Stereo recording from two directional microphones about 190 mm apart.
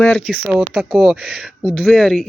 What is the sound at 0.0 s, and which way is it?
Speech, 10° left (ahead or behind).